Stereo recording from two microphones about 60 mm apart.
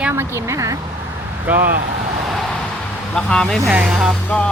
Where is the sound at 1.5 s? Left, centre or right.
Right.